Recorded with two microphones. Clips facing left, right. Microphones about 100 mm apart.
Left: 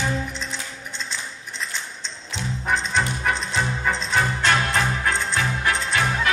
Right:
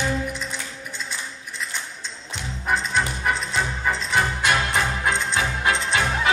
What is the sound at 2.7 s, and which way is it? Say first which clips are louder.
Music: even; 5° right (ahead or behind).